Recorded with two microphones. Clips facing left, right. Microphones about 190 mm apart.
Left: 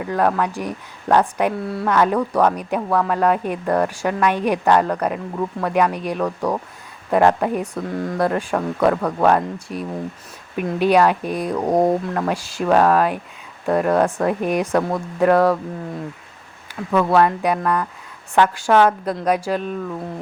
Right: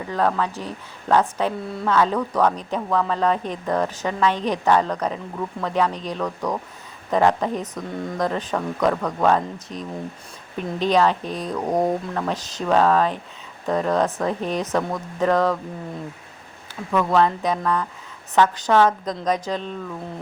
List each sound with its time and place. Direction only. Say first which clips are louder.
0.1 s speech: left 2 dB; 10° left (ahead or behind)
11.5 s speech: left 4 dB; 35° left (ahead or behind)
12.1 s speech: left 3 dB; 10° left (ahead or behind)
16.9 s speech: left 3 dB; 10° left (ahead or behind)